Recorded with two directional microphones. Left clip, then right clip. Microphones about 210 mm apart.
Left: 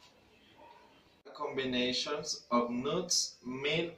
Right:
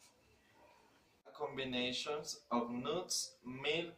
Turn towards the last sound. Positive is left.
turn(degrees=-15)  # may be behind; listen again after turning